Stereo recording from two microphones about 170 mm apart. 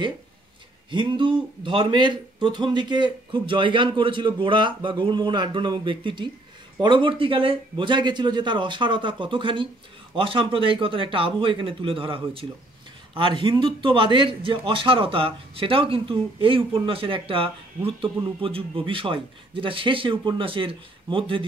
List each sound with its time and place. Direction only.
0.8 s a man's voice: 30° right (ahead or behind)